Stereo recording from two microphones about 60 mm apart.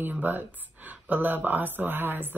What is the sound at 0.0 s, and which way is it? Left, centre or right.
Speech, right.